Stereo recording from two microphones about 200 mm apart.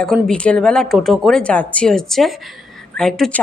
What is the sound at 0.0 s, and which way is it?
A woman's voice, 5° left (ahead or behind).